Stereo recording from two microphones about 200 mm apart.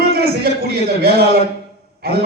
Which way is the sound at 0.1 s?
50° right (ahead or behind).